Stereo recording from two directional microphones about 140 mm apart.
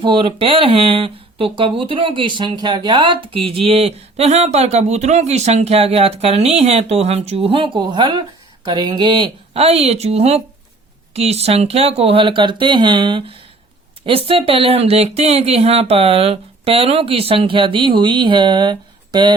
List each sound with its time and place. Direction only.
0.0 s speech: 35° right (ahead or behind)
9.5 s speech: 45° right (ahead or behind)